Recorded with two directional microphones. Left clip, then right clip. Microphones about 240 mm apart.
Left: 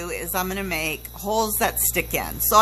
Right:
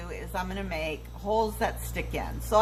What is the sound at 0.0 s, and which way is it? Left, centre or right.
Speech, left.